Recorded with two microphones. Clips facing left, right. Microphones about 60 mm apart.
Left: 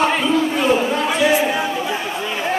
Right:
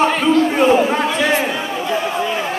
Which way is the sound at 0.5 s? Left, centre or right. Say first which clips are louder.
Right 4 dB; right.